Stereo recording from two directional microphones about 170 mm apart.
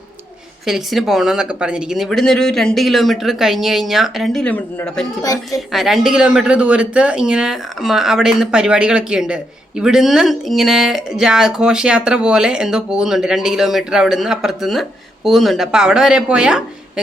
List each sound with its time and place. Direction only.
0.6 s speech: centre (ahead or behind)